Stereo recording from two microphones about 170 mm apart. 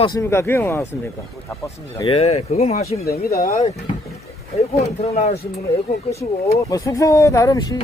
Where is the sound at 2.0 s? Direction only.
35° left (ahead or behind).